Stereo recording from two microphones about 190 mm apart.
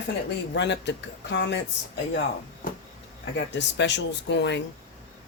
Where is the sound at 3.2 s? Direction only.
65° left (ahead or behind).